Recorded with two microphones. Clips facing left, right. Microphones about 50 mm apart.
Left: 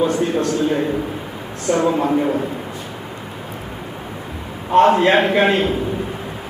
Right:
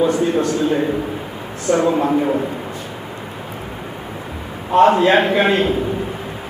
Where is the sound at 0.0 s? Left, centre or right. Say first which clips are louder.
Right 2 dB; centre.